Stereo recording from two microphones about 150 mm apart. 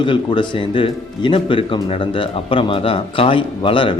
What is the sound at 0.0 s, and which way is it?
Speech, 35° left (ahead or behind).